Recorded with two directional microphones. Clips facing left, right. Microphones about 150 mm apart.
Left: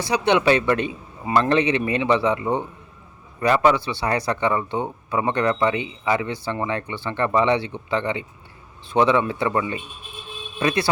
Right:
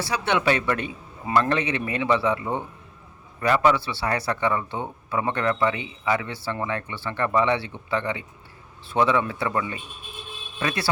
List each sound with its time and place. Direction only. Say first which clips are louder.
0.0 s a man's voice: left 5 dB; 20° left (ahead or behind)